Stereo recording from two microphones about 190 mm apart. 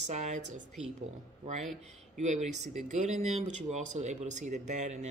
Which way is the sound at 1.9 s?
40° right (ahead or behind).